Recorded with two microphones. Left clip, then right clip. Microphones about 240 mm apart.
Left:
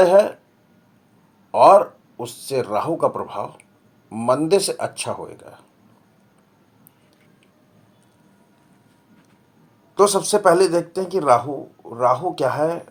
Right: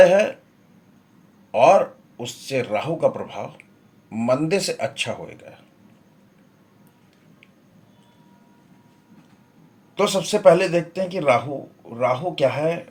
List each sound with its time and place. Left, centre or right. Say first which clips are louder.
0.0 s speech: even; left
1.5 s speech: left 3 dB; left
10.1 s speech: right 1 dB; left